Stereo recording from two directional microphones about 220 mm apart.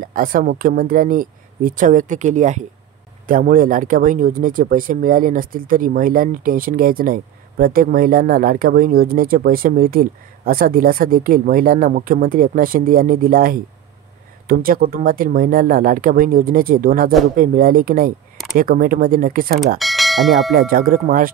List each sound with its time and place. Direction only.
0.0 s speech: 40° right (ahead or behind)
19.8 s speech: centre (ahead or behind)
20.5 s speech: 40° right (ahead or behind)